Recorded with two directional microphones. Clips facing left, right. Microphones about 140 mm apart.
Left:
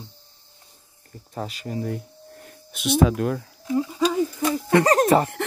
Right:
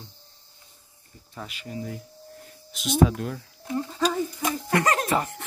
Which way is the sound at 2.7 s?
65° left (ahead or behind).